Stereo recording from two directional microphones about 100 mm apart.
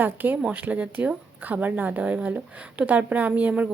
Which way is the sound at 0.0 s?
20° right (ahead or behind).